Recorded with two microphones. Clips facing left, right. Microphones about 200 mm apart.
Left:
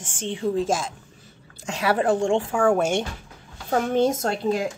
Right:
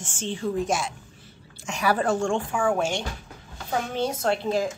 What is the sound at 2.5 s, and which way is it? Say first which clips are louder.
Speech: left 5 dB; 45° left (ahead or behind).